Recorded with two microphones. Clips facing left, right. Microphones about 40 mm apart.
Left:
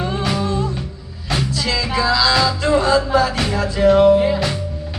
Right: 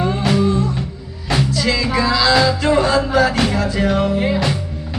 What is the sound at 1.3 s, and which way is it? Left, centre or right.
Music, right.